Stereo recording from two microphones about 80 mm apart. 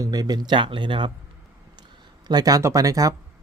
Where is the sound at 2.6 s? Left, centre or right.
Right.